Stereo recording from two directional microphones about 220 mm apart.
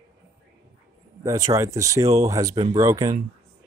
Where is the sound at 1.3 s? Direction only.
15° right (ahead or behind).